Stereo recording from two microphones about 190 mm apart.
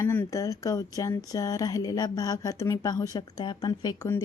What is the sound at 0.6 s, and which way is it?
A woman's voice, 15° left (ahead or behind).